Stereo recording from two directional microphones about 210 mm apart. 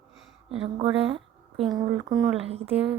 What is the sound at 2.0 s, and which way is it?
Speech, 20° right (ahead or behind).